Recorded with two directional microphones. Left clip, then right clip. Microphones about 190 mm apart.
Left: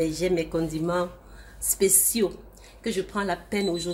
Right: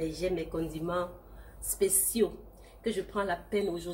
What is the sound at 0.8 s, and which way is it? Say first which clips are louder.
Speech: left 5 dB; 65° left (ahead or behind).